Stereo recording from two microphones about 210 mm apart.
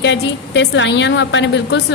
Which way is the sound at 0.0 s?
60° left (ahead or behind).